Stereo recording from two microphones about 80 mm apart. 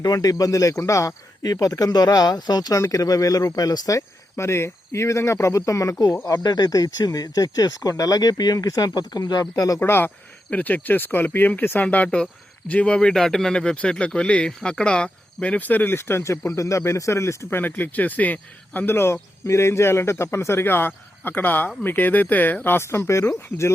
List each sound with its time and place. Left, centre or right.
0.0 s speech: left
2.7 s speech: left
9.8 s speech: left
17.6 s speech: left